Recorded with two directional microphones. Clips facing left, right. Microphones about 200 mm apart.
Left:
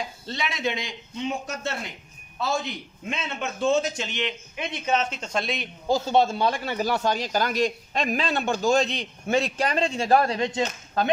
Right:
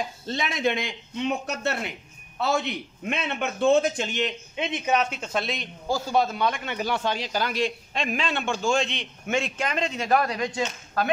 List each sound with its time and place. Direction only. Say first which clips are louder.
0.3 s a man's voice: right 3 dB; 50° right (ahead or behind)
4.6 s speech: right 1 dB; 20° right (ahead or behind); by 5.7 s centre (ahead or behind)
5.9 s speech: left 3 dB; 20° left (ahead or behind)